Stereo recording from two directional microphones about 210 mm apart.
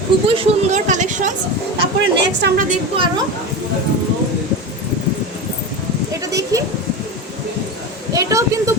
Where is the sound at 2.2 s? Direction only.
50° right (ahead or behind).